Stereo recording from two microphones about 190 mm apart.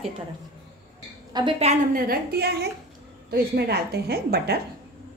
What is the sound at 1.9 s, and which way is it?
A woman's voice, 50° right (ahead or behind).